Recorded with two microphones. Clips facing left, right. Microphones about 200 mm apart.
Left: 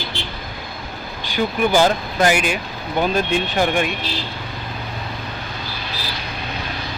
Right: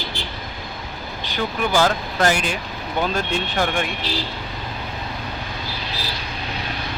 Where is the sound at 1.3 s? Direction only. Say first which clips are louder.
Left 4 dB; 15° left (ahead or behind).